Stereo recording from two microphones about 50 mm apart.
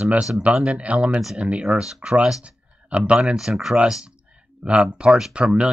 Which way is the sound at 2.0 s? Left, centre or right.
Centre.